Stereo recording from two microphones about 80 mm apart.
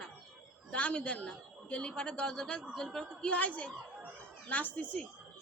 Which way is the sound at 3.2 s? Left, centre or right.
Centre.